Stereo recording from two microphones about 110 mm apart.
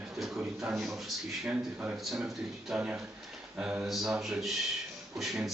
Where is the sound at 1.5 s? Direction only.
15° right (ahead or behind).